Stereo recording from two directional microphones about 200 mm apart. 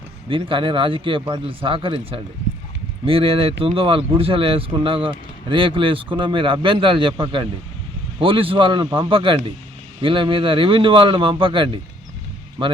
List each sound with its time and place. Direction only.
0.3 s speech: 25° right (ahead or behind)